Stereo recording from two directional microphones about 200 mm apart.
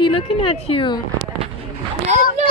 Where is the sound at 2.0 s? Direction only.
35° right (ahead or behind).